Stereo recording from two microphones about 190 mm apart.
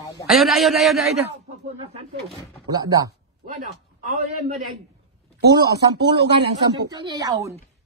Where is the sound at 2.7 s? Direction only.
20° right (ahead or behind).